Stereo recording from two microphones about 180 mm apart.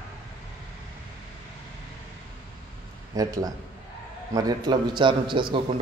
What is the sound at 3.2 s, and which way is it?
Speech, 20° right (ahead or behind).